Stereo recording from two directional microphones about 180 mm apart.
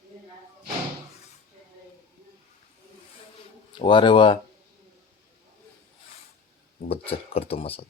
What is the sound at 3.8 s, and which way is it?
Speech, 25° left (ahead or behind).